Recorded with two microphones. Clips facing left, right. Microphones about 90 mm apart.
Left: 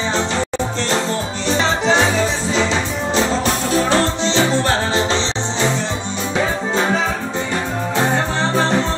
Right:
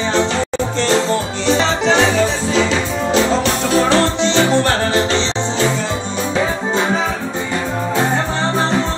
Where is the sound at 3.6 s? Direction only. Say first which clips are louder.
Right 3 dB; 70° right (ahead or behind).